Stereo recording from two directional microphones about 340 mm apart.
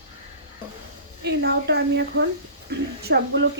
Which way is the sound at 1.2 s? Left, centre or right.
Right.